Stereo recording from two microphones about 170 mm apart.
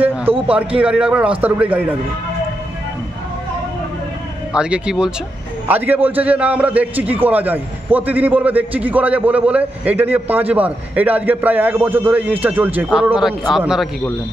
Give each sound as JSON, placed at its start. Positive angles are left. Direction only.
{"t": 0.3, "sound": "a man's voice", "side_deg": -35}
{"t": 0.7, "sound": "a man's voice", "side_deg": -5}
{"t": 4.6, "sound": "a man's voice", "side_deg": -5}